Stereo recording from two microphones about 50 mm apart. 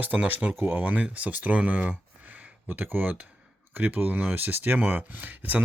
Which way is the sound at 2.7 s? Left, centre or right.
Right.